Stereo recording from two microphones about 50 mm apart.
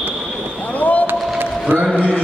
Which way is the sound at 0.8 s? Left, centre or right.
Left.